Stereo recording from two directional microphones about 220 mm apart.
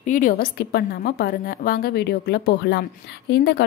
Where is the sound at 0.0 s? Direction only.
35° left (ahead or behind).